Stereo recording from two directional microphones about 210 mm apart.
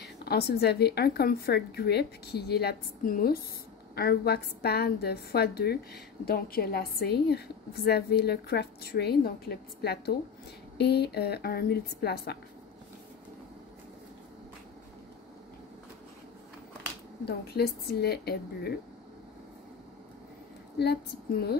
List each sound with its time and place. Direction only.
0.0 s a woman's voice: 50° left (ahead or behind)
17.2 s a woman's voice: 50° left (ahead or behind)
20.8 s a woman's voice: 50° left (ahead or behind)